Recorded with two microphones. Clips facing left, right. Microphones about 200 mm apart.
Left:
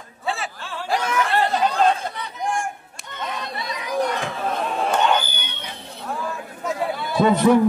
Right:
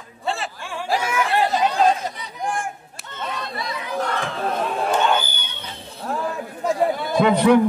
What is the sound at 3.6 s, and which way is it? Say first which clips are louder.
Children playing: left 3 dB; 15° left (ahead or behind).